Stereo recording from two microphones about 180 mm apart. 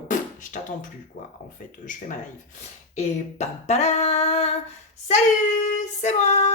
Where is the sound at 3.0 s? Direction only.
40° left (ahead or behind).